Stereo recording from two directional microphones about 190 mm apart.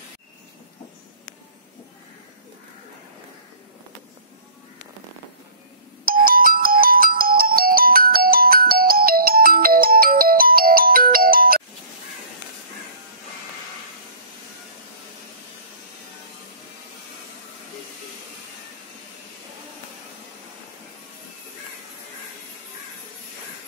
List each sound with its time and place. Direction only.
6.2 s music: 50° right (ahead or behind)